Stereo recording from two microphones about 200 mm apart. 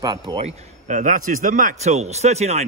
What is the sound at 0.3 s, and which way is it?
A man's voice, 30° right (ahead or behind).